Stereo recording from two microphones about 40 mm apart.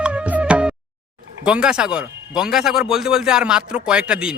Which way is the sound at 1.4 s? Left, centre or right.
Right.